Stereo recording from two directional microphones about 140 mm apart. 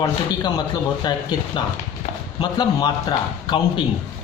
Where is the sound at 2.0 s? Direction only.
50° left (ahead or behind).